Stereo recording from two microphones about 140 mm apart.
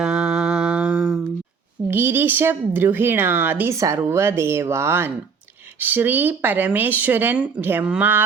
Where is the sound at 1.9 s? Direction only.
15° right (ahead or behind).